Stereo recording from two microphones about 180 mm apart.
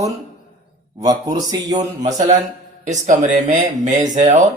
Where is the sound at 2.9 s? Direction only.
45° right (ahead or behind).